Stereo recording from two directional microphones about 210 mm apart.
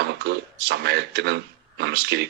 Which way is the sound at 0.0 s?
50° right (ahead or behind).